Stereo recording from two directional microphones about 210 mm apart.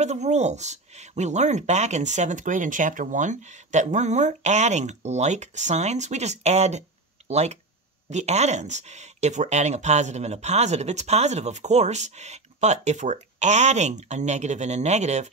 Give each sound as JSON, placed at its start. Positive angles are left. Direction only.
{"t": 0.0, "sound": "speech", "side_deg": -30}